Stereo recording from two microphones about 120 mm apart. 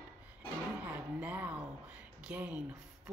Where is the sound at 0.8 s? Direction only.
15° right (ahead or behind).